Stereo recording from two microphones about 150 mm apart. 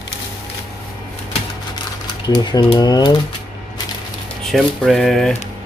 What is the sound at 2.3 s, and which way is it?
Speech, 30° left (ahead or behind).